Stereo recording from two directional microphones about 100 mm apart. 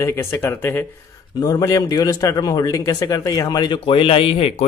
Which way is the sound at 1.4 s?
35° left (ahead or behind).